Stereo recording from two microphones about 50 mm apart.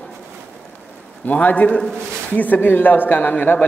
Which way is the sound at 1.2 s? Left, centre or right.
Left.